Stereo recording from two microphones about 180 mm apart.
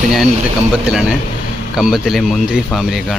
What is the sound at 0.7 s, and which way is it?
Speech, 5° right (ahead or behind).